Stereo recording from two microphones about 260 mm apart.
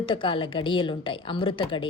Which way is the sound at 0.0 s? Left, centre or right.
Centre.